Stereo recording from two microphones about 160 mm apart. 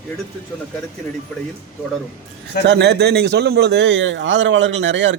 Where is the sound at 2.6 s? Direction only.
90° right.